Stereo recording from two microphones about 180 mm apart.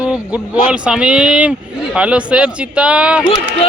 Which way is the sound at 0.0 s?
5° right (ahead or behind).